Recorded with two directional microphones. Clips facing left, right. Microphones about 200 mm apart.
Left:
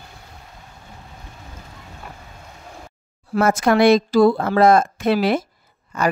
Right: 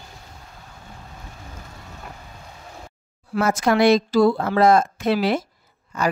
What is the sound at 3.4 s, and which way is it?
A woman's voice, 50° left (ahead or behind).